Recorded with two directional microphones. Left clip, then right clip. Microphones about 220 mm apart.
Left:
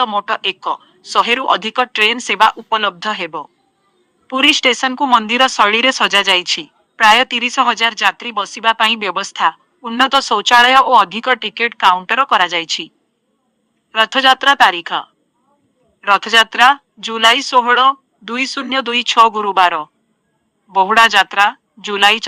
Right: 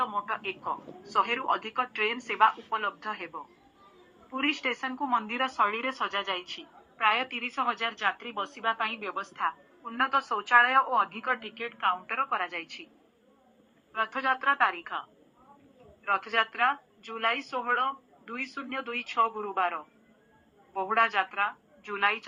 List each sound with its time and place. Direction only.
0.0 s speech: 60° left (ahead or behind)
13.9 s speech: 55° left (ahead or behind)
16.0 s speech: 60° left (ahead or behind)